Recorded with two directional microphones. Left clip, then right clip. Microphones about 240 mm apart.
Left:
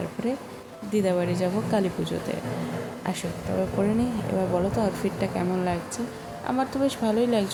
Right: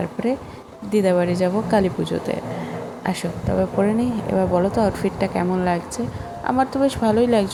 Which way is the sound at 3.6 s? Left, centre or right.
Centre.